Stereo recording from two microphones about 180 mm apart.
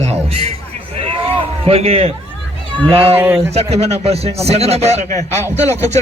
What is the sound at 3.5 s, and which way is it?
Speech, 35° right (ahead or behind).